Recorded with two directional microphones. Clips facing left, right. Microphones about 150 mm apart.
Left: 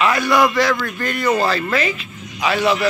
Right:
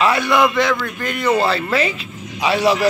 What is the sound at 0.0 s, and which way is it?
A man's voice, 25° right (ahead or behind).